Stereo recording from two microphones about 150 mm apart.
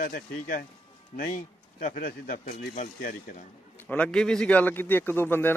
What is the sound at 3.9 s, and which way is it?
A man's voice, 10° left (ahead or behind).